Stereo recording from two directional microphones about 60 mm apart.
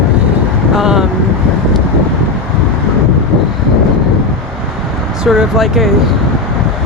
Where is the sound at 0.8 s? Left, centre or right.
Centre.